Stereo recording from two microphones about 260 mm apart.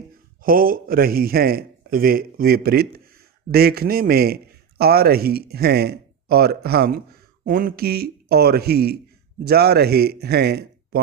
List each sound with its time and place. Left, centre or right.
0.4 s a man's voice: right